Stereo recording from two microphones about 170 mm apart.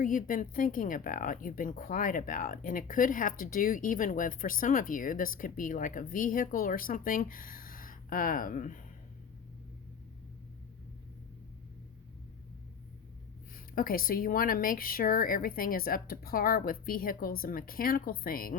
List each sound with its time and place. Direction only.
0.0 s speech: 50° left (ahead or behind)
13.7 s speech: 60° left (ahead or behind)